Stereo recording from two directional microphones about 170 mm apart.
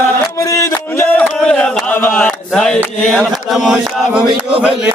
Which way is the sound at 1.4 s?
5° left (ahead or behind).